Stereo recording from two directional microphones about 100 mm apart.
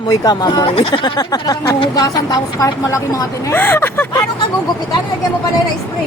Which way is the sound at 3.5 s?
20° left (ahead or behind).